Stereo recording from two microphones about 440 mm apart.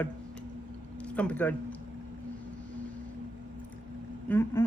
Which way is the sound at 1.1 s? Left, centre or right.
Centre.